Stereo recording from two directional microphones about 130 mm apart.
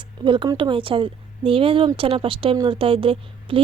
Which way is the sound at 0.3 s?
40° right (ahead or behind).